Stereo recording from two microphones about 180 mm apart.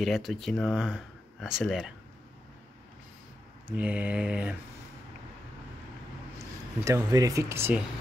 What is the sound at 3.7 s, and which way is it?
Mantra, 10° right (ahead or behind).